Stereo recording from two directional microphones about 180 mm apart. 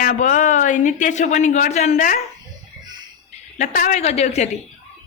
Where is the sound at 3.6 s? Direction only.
45° left (ahead or behind).